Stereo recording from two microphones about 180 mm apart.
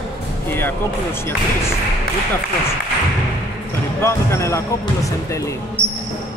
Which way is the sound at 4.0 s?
15° left (ahead or behind).